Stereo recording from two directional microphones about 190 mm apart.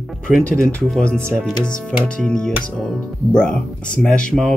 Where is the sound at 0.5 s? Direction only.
5° left (ahead or behind).